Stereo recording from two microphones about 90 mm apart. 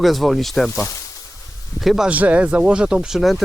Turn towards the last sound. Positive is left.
turn(degrees=0)  # may be behind; listen again after turning